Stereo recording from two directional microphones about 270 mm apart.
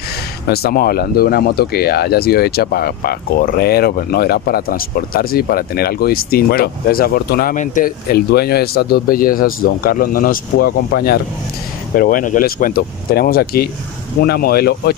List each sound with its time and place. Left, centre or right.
0.5 s speech: left